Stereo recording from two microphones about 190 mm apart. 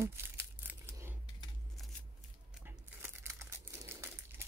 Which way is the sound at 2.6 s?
15° right (ahead or behind).